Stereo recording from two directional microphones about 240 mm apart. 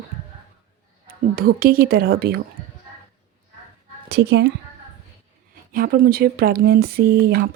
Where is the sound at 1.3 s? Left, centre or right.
Right.